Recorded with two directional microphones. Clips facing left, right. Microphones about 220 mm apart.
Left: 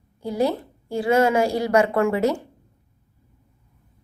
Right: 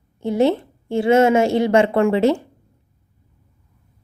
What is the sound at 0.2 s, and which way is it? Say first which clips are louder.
A woman's voice: right 5 dB; 25° right (ahead or behind).